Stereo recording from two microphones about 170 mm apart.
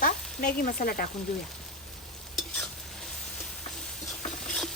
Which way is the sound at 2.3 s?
Centre (ahead or behind).